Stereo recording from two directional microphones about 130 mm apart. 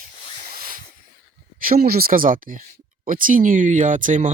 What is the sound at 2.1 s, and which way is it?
Speech, 90° right.